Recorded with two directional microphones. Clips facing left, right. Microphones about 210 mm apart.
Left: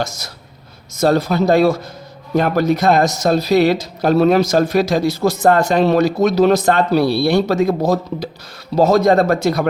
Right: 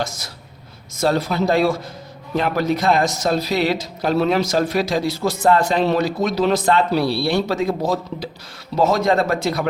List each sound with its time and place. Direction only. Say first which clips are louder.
0.9 s speech: left 4 dB; 45° left (ahead or behind)